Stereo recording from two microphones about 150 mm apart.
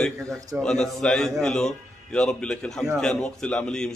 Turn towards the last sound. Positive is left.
turn(degrees=5)  # may be behind; listen again after turning